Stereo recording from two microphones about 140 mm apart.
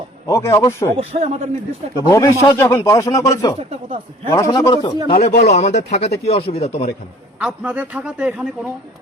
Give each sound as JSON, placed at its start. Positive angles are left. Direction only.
{"t": 0.3, "sound": "speech", "side_deg": 20}
{"t": 0.9, "sound": "speech", "side_deg": -50}
{"t": 2.0, "sound": "speech", "side_deg": 25}
{"t": 3.8, "sound": "speech", "side_deg": -40}
{"t": 4.3, "sound": "speech", "side_deg": 25}
{"t": 5.0, "sound": "speech", "side_deg": 45}
{"t": 7.3, "sound": "a woman's voice", "side_deg": -10}